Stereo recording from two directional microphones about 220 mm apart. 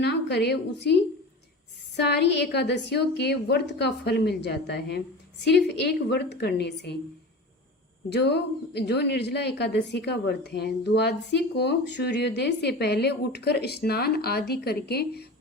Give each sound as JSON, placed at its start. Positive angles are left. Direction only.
{"t": 0.0, "sound": "a woman's voice", "side_deg": 50}
{"t": 2.0, "sound": "a woman's voice", "side_deg": 50}
{"t": 8.1, "sound": "a woman's voice", "side_deg": 50}